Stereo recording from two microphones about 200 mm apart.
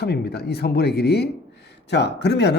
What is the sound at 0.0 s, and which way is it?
A man's voice, 55° left (ahead or behind).